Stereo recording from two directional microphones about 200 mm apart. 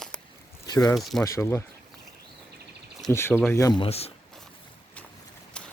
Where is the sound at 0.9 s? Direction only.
Centre (ahead or behind).